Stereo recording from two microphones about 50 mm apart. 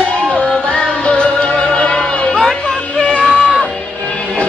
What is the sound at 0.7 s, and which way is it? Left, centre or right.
Music, centre.